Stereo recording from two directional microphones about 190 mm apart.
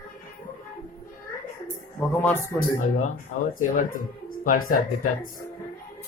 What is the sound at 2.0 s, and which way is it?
Speech, 10° left (ahead or behind).